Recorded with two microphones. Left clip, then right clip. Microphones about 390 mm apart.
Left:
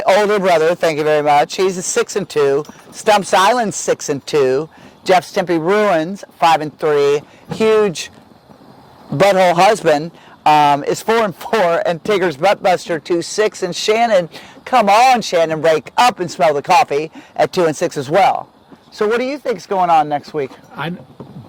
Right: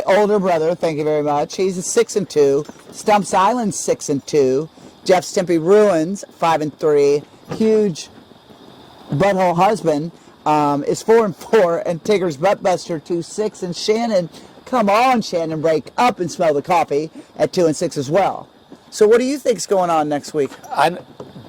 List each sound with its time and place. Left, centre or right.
0.0 s speech: left
3.2 s a man's voice: left
3.7 s speech: left
9.1 s a man's voice: left
10.4 s speech: left
13.7 s speech: left
14.6 s speech: left
18.9 s speech: left